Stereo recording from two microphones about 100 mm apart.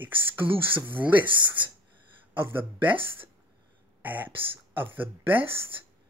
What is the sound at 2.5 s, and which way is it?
Speech, 20° right (ahead or behind).